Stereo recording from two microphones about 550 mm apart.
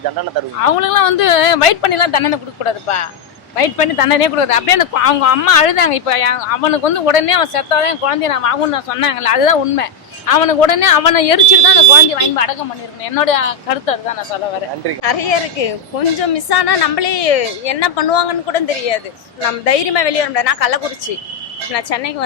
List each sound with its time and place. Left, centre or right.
0.6 s speech: left
15.0 s a woman's voice: left